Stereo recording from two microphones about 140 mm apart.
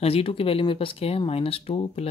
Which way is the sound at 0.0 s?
45° left (ahead or behind).